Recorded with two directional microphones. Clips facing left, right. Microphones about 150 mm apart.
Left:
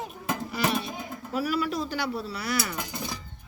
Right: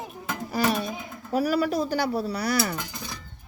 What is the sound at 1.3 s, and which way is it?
Speech, 40° right (ahead or behind).